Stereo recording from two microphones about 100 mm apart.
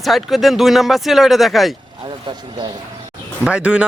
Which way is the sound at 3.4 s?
10° right (ahead or behind).